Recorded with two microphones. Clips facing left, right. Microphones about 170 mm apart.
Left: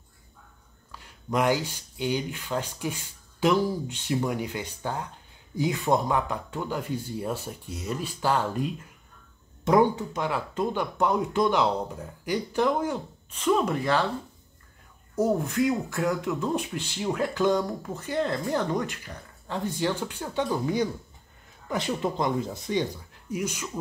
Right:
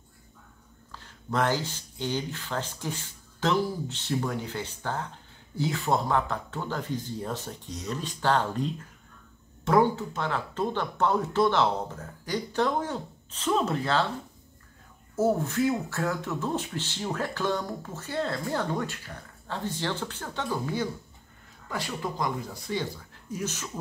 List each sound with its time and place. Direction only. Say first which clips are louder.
0.9 s speech: left 2 dB; 10° left (ahead or behind)
15.1 s speech: left 1 dB; 15° left (ahead or behind)